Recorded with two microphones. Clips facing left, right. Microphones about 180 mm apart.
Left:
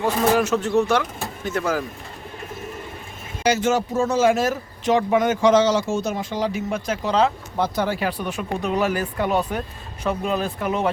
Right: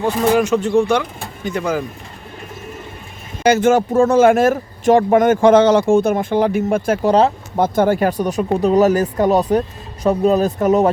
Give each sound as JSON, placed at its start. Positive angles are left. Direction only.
{"t": 0.0, "sound": "speech", "side_deg": 0}
{"t": 3.4, "sound": "speech", "side_deg": -55}